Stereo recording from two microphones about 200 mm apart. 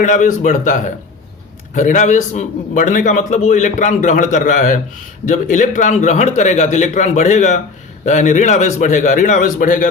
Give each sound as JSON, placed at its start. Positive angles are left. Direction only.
{"t": 0.0, "sound": "a man's voice", "side_deg": 40}